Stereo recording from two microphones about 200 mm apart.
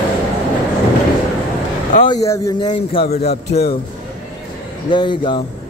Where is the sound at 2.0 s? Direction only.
15° left (ahead or behind); by 3.6 s 30° left (ahead or behind).